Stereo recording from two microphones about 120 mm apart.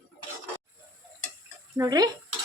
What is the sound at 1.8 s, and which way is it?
Speech, 35° right (ahead or behind).